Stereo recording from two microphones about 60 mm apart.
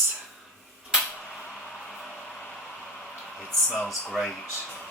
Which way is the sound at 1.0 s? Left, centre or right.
Centre.